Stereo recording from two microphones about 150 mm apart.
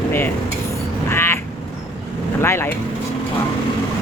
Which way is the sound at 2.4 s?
15° left (ahead or behind).